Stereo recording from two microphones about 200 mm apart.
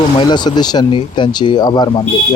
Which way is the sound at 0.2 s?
20° left (ahead or behind).